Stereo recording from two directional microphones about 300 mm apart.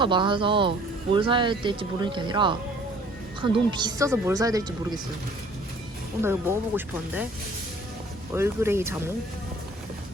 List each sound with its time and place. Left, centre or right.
0.0 s speech: centre
6.2 s speech: centre
8.3 s speech: centre